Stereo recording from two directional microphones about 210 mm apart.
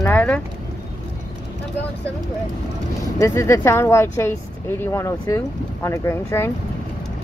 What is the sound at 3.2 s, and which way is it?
Speech, 15° left (ahead or behind).